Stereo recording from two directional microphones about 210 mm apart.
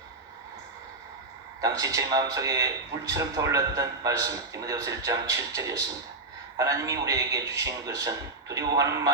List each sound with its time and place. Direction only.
1.6 s a man's voice: 15° right (ahead or behind)